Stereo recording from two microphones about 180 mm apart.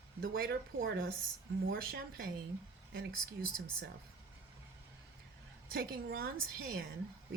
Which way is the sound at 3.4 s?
55° right (ahead or behind).